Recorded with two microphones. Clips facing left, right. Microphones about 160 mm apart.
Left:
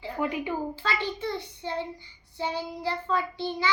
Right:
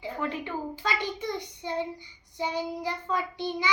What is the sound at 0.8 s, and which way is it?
Child singing, 15° right (ahead or behind).